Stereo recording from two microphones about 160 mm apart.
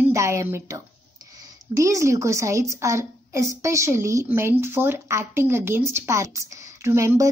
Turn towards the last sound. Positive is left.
turn(degrees=-15)  # may be behind; listen again after turning